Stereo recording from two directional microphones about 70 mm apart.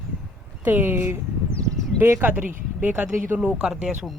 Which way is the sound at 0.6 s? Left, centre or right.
Right.